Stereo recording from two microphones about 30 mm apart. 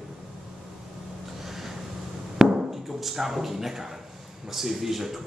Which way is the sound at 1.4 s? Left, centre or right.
Centre.